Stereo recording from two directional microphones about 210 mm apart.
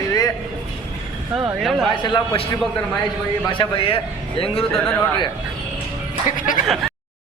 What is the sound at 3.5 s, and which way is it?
Speech, 25° left (ahead or behind).